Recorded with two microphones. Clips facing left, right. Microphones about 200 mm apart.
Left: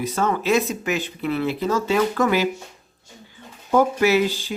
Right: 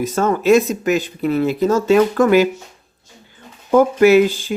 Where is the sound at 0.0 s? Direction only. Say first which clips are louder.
Right 6 dB; 45° right (ahead or behind).